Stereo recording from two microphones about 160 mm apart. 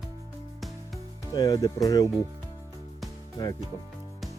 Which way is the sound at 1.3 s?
25° left (ahead or behind).